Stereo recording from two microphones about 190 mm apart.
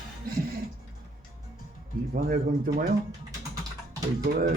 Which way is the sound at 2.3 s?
55° right (ahead or behind).